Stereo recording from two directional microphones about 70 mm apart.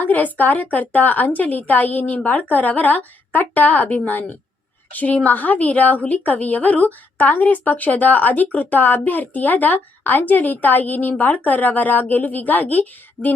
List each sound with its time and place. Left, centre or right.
0.0 s a woman's voice: left